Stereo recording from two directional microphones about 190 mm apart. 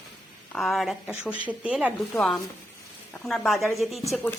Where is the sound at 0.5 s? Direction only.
Centre (ahead or behind).